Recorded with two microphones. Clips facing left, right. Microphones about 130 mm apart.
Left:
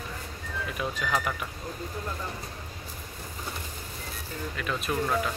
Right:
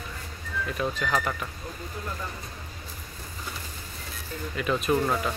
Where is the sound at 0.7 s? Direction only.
10° left (ahead or behind).